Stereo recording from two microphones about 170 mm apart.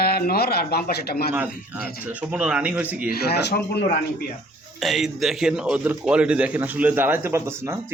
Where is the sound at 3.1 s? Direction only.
70° left (ahead or behind).